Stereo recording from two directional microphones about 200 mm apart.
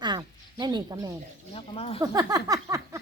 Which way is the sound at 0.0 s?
20° right (ahead or behind).